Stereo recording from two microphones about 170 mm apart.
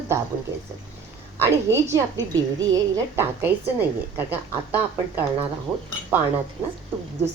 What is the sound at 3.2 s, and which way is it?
A woman's voice, 15° right (ahead or behind).